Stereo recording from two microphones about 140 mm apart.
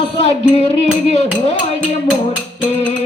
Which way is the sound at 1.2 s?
50° left (ahead or behind).